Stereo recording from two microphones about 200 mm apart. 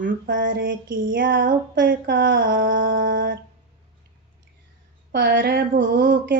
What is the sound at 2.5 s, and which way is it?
Child singing, 45° right (ahead or behind).